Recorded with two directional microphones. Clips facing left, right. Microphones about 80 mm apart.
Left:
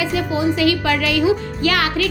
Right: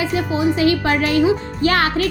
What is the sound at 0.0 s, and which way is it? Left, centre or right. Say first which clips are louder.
A woman's voice: right 1 dB; right.